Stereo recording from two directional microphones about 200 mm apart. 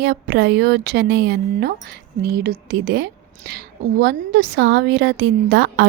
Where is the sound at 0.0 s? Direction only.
55° right (ahead or behind).